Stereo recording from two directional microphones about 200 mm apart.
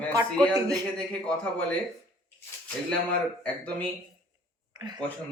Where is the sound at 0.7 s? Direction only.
5° left (ahead or behind).